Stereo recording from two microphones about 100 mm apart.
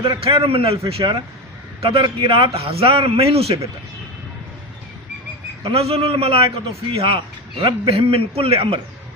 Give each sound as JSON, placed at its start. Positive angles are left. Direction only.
{"t": 0.3, "sound": "a man's voice", "side_deg": -70}
{"t": 5.6, "sound": "a man's voice", "side_deg": -75}